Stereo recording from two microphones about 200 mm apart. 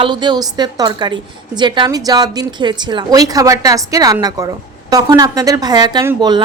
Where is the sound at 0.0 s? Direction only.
25° right (ahead or behind).